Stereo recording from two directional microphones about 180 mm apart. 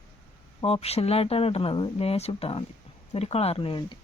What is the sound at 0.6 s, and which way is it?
Speech, 35° left (ahead or behind).